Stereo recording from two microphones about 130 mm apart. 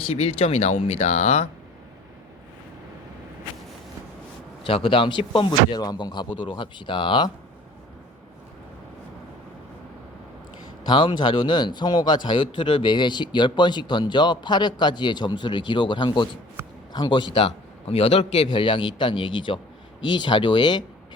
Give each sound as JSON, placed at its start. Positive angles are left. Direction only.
{"t": 0.1, "sound": "speech", "side_deg": 50}
{"t": 4.6, "sound": "a man's voice", "side_deg": 45}
{"t": 10.8, "sound": "a man's voice", "side_deg": 35}
{"t": 16.6, "sound": "a sound", "side_deg": -20}
{"t": 16.9, "sound": "a man's voice", "side_deg": 35}
{"t": 18.4, "sound": "a man's voice", "side_deg": 40}